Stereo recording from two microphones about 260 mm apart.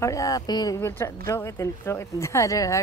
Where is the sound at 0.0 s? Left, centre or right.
Centre.